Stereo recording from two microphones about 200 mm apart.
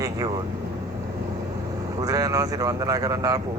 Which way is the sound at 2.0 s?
15° right (ahead or behind).